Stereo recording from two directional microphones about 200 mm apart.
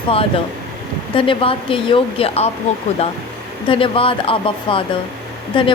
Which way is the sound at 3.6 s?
25° left (ahead or behind).